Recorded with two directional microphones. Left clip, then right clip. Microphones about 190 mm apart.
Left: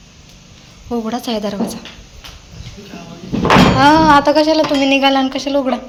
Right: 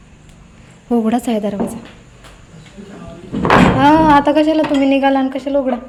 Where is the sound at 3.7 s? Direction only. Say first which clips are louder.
Left 1 dB; 20° right (ahead or behind).